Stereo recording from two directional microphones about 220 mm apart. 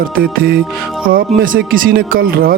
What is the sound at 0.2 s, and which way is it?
A man's voice, 45° right (ahead or behind).